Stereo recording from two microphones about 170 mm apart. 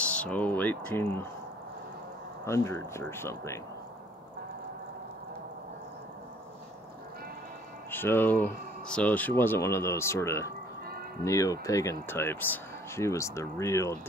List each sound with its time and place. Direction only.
0.0 s speech: 5° left (ahead or behind)
2.4 s speech: 15° left (ahead or behind)
7.9 s speech: 10° left (ahead or behind)